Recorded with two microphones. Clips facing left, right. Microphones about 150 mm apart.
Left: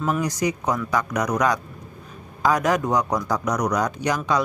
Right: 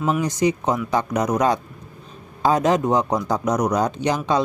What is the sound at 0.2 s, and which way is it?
Speech, 25° right (ahead or behind).